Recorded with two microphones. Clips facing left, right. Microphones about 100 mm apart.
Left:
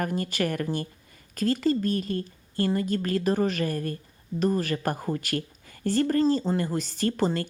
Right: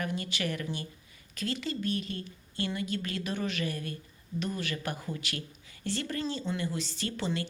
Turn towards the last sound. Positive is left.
turn(degrees=45)  # may be behind; listen again after turning